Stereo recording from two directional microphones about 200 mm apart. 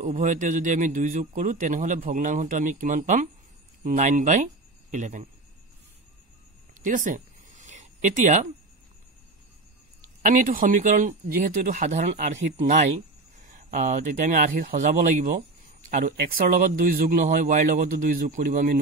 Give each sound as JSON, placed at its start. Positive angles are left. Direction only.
{"t": 0.0, "sound": "a man's voice", "side_deg": -40}
{"t": 6.7, "sound": "a sound", "side_deg": -40}
{"t": 10.2, "sound": "a man's voice", "side_deg": -40}